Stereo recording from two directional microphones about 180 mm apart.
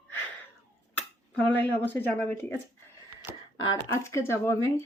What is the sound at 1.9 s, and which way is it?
Speech, 10° left (ahead or behind).